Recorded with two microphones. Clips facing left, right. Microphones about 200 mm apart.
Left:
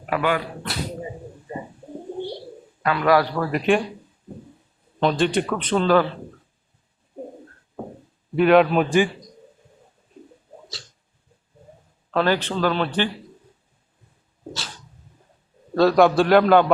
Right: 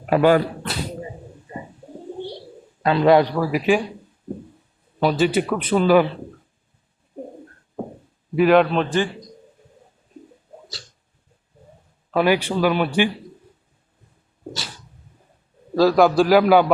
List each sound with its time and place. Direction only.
0.1 s speech: 35° right (ahead or behind)
2.8 s a man's voice: 25° right (ahead or behind)
3.3 s a man's voice: 5° right (ahead or behind)
4.9 s a man's voice: 5° right (ahead or behind)
8.4 s a man's voice: centre (ahead or behind)
12.1 s a man's voice: 10° right (ahead or behind)
15.7 s a man's voice: centre (ahead or behind)